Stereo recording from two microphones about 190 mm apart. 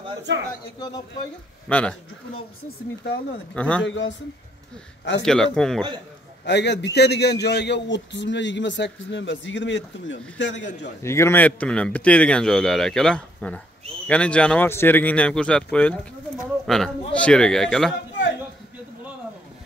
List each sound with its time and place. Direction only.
1.7 s speech: 5° left (ahead or behind)
3.5 s speech: 5° left (ahead or behind)
3.8 s speech: 85° left
5.2 s speech: 5° left (ahead or behind)
6.4 s a man's voice: 65° left (ahead or behind)
11.0 s speech: 15° left (ahead or behind)